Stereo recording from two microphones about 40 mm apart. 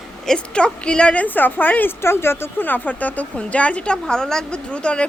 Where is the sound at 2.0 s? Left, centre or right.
Left.